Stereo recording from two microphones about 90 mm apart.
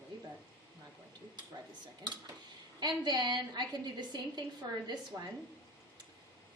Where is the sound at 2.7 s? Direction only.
50° right (ahead or behind).